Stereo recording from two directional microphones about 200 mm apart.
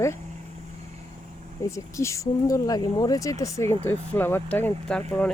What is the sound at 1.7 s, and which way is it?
Speech, 15° left (ahead or behind).